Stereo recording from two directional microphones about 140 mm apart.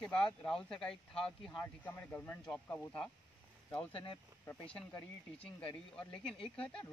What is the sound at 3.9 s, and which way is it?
Speech, 35° left (ahead or behind).